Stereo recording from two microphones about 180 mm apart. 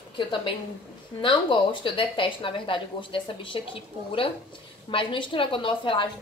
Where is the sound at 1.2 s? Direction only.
25° left (ahead or behind).